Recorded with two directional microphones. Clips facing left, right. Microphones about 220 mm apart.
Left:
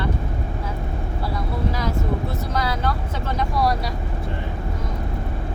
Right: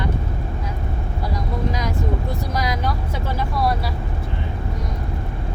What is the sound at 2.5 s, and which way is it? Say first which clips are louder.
Vehicle: even; 10° right (ahead or behind).